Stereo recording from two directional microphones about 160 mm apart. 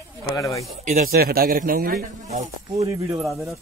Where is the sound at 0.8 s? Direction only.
65° right (ahead or behind).